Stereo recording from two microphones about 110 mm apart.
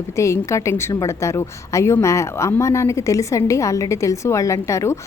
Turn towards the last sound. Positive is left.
turn(degrees=25)  # may be behind; listen again after turning